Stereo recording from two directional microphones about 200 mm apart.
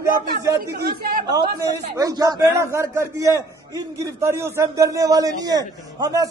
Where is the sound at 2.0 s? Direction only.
20° right (ahead or behind).